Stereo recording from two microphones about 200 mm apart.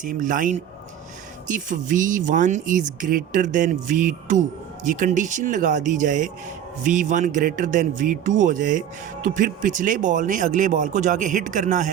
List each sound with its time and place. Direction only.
0.0 s speech: 40° right (ahead or behind)